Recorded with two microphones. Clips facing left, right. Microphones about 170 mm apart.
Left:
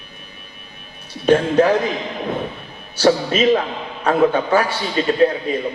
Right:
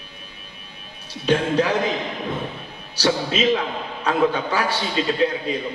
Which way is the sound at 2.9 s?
50° left (ahead or behind).